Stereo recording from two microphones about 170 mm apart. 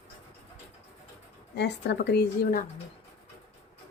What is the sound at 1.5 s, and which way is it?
A woman's voice, 80° left.